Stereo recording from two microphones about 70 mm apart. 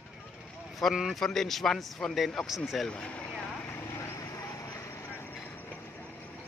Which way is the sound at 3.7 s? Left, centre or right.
Left.